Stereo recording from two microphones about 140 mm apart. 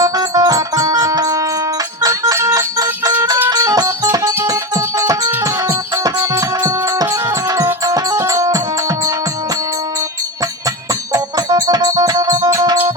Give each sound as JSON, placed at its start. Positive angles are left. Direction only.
{"t": 0.0, "sound": "music", "side_deg": -25}
{"t": 11.1, "sound": "music", "side_deg": -25}